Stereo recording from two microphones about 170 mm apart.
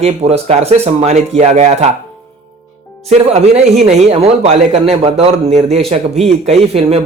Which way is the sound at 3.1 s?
40° right (ahead or behind).